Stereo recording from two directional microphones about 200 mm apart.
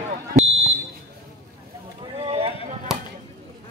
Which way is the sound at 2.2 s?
30° right (ahead or behind).